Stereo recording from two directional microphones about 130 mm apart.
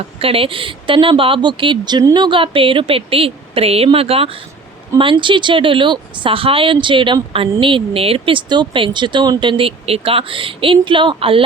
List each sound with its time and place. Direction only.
0.2 s speech: 45° right (ahead or behind)